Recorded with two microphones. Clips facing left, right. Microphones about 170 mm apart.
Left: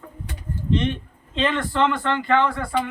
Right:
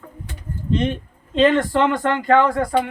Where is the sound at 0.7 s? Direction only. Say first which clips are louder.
Right 3 dB; 40° right (ahead or behind).